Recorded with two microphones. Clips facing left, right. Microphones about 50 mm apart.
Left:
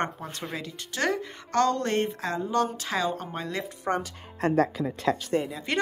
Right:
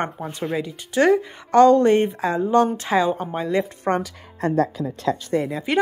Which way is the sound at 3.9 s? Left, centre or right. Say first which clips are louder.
Right 5 dB; right.